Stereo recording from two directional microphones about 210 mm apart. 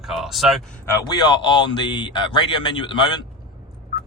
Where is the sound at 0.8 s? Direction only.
15° left (ahead or behind).